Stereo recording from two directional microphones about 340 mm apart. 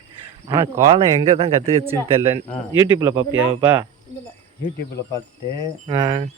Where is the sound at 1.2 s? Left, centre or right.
Centre.